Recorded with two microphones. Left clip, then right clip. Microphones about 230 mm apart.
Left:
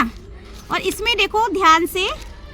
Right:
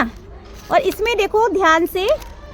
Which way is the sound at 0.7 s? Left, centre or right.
Left.